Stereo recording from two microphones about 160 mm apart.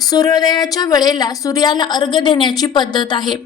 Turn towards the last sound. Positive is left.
turn(degrees=30)  # may be behind; listen again after turning